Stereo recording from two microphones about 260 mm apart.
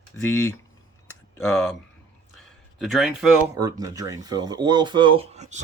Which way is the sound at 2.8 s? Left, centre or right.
Centre.